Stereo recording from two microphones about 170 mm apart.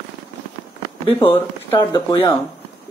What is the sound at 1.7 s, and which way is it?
Speech, 20° left (ahead or behind).